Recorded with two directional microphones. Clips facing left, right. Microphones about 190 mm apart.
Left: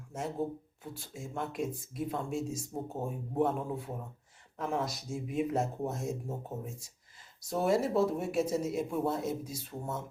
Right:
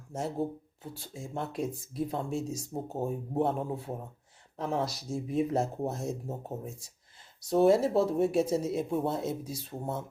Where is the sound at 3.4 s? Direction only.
30° right (ahead or behind).